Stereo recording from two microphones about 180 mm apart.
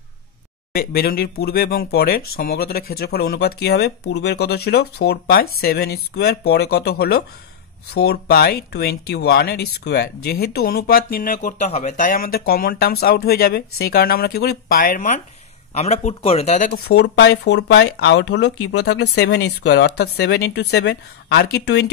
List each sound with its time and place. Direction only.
0.7 s speech: 55° left (ahead or behind); by 16.7 s 40° left (ahead or behind)
16.7 s speech: 65° left (ahead or behind)